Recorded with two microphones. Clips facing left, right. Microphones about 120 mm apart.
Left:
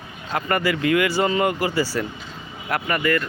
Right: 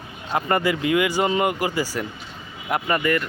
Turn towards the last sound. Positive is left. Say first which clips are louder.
# even
turn(degrees=-20)  # may be behind; listen again after turning